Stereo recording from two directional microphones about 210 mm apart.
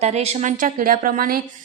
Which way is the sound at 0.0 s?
30° right (ahead or behind).